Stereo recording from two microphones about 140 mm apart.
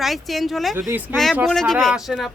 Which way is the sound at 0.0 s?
Centre (ahead or behind).